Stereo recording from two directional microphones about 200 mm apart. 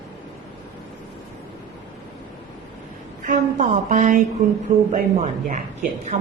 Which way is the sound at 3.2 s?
40° right (ahead or behind).